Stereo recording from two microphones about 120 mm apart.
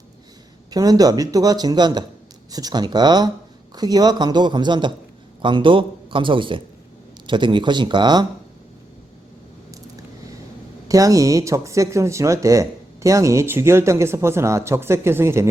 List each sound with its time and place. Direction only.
0.7 s a man's voice: 30° right (ahead or behind)
10.8 s speech: 30° right (ahead or behind)